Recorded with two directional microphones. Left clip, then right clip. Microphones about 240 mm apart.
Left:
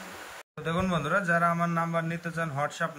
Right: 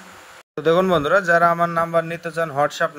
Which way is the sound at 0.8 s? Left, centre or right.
Right.